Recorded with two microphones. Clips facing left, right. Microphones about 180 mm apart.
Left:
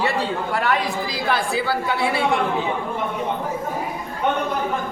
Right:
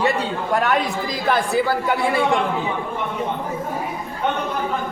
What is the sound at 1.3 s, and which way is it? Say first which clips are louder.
Speech: right 4 dB; 45° right (ahead or behind).